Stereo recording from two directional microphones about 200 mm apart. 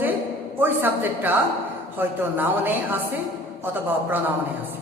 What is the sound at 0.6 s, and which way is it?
A man's voice, 10° right (ahead or behind).